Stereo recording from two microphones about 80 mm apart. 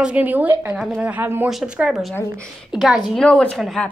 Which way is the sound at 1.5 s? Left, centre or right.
Centre.